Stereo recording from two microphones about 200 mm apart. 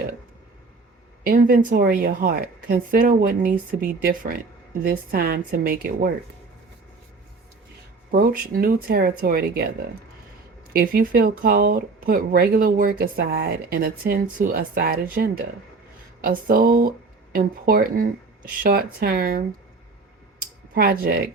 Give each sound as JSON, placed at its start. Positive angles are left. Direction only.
{"t": 1.2, "sound": "speech", "side_deg": -45}
{"t": 8.1, "sound": "speech", "side_deg": -45}
{"t": 20.4, "sound": "a sound", "side_deg": -50}